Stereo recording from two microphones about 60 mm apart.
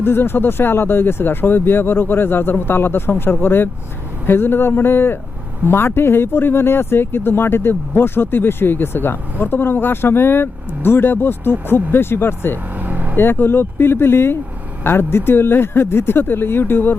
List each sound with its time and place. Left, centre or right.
0.0 s speech: left
12.8 s vehicle: right
13.1 s speech: left